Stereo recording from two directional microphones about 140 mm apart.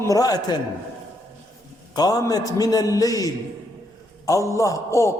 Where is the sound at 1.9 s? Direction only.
30° left (ahead or behind).